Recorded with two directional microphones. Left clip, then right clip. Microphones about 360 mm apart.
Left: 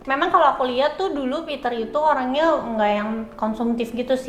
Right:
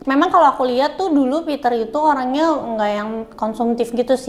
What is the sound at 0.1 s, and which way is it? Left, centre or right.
A woman's voice, right.